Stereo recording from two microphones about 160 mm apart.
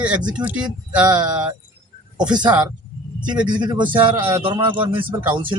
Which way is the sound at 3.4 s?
30° right (ahead or behind).